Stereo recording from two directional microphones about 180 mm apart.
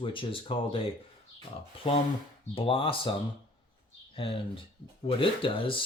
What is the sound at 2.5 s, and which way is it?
Speech, 30° left (ahead or behind).